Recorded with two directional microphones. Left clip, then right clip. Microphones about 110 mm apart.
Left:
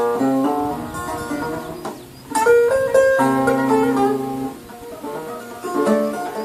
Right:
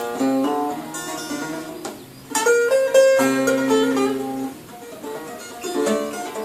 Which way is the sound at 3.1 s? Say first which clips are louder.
Left 1 dB; 15° right (ahead or behind).